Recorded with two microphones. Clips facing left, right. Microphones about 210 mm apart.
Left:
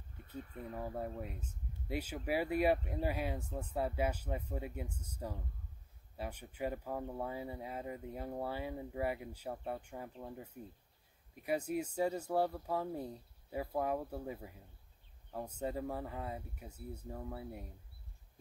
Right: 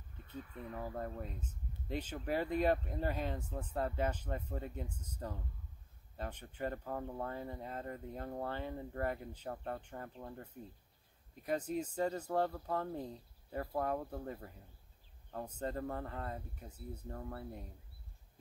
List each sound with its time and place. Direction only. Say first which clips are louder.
0.4 s speech: left 1 dB; 35° left (ahead or behind)
0.9 s speech: left 1 dB; 10° left (ahead or behind)